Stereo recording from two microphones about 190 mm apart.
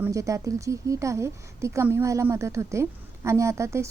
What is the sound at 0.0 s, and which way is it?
Speech, 15° right (ahead or behind).